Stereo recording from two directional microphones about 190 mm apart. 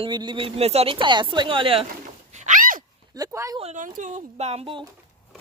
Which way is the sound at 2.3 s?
40° right (ahead or behind).